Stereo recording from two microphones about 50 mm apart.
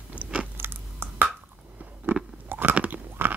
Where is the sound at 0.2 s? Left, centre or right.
Right.